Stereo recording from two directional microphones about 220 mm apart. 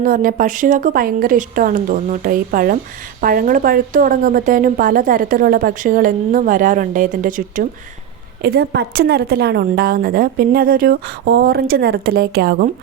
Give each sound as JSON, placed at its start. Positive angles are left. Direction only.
{"t": 0.0, "sound": "a woman's voice", "side_deg": -40}